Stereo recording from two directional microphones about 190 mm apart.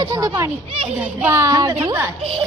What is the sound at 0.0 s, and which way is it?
A woman's voice, 20° right (ahead or behind).